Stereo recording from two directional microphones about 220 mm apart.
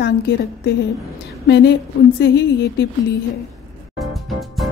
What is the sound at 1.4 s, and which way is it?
A woman's voice, 50° left (ahead or behind).